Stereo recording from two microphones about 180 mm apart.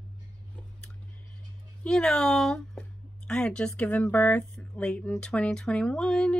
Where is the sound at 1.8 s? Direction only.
5° left (ahead or behind).